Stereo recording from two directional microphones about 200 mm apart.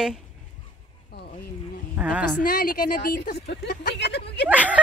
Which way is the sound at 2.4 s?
50° left (ahead or behind).